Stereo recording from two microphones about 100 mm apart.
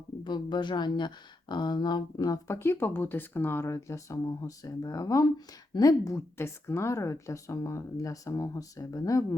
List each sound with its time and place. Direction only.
0.3 s speech: 50° left (ahead or behind)
2.6 s speech: 25° left (ahead or behind)